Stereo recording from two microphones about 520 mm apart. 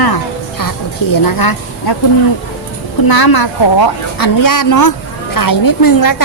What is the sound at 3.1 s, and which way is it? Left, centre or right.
A woman's voice, left.